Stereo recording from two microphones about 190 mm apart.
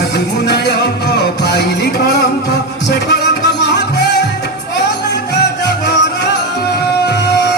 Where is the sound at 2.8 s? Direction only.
60° left (ahead or behind).